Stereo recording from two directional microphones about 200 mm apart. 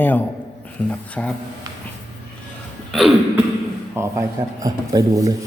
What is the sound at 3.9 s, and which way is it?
Speech, 15° right (ahead or behind).